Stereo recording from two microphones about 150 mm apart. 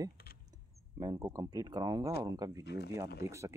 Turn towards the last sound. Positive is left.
turn(degrees=-20)  # may be behind; listen again after turning